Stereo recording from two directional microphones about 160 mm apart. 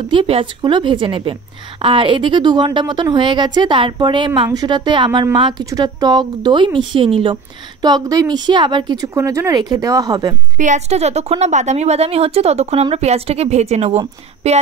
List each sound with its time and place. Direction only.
0.1 s a woman's voice: 35° right (ahead or behind)
10.6 s a woman's voice: 45° right (ahead or behind)